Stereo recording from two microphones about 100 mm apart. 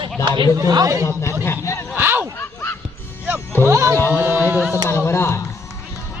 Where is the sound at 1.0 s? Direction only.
30° left (ahead or behind).